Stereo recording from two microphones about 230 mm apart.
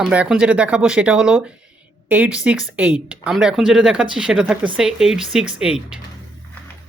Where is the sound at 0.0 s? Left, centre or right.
Centre.